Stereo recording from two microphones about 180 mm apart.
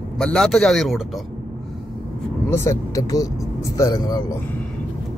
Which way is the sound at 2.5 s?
20° left (ahead or behind).